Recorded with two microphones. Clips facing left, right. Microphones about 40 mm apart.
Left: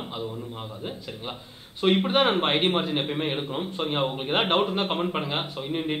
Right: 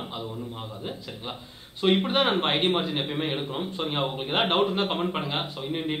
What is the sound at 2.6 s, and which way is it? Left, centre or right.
Speech, left.